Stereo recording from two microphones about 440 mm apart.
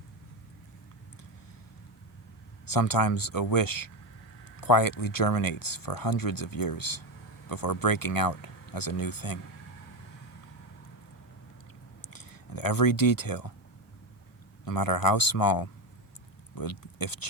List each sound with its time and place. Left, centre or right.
2.6 s speech: left
12.0 s speech: left
14.6 s speech: left